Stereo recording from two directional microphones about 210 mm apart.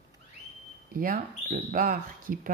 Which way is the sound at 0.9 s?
40° right (ahead or behind).